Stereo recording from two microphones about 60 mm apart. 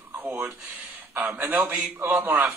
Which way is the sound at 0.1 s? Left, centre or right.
Right.